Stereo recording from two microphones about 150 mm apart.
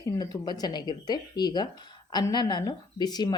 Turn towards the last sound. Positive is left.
turn(degrees=25)  # may be behind; listen again after turning